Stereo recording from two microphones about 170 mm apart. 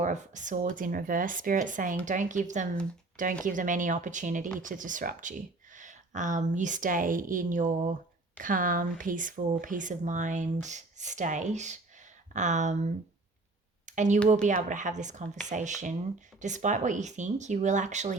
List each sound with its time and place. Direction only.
0.0 s speech: 45° right (ahead or behind)
13.8 s a sound: 45° right (ahead or behind)
14.4 s speech: 45° right (ahead or behind)